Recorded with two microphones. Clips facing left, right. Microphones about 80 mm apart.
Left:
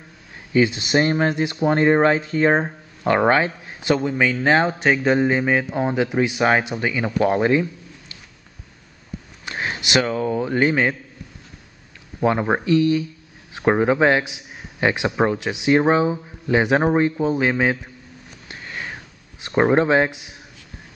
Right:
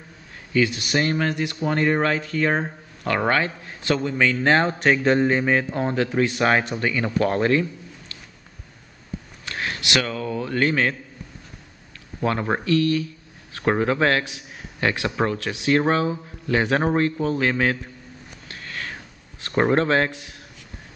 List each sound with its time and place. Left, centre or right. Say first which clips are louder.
0.5 s speech: left 3 dB; left
9.5 s a man's voice: left 2 dB; left
12.2 s speech: left 4 dB; centre
18.5 s sniff: left 2 dB; centre
19.4 s speech: left 3 dB; centre